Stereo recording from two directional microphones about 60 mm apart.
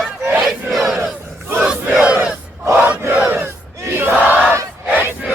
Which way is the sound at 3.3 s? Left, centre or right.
Right.